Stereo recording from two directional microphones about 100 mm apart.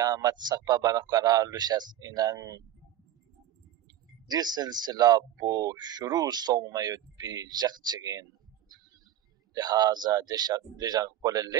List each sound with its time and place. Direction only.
0.0 s speech: 40° right (ahead or behind)
4.3 s speech: 45° right (ahead or behind)